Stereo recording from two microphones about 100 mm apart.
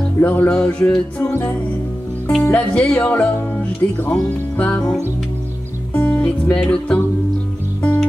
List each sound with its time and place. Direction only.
0.2 s speech: 15° left (ahead or behind)
1.2 s music: 25° left (ahead or behind)
2.5 s speech: 10° left (ahead or behind)
5.9 s speech: 15° left (ahead or behind)